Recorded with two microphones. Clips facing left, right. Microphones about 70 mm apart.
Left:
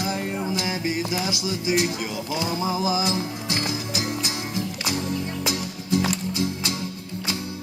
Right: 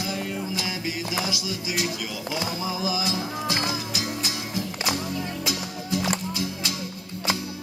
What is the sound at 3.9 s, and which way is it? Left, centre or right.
Music, left.